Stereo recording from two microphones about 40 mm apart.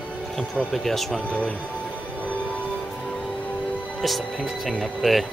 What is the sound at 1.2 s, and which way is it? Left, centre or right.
Speech, left.